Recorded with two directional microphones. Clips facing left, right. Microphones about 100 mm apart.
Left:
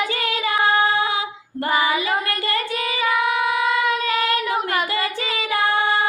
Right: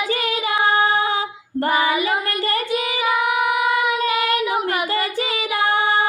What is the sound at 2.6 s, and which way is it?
Child singing, 20° right (ahead or behind).